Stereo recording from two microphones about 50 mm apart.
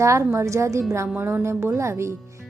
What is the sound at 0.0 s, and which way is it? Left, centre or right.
A woman's voice, right.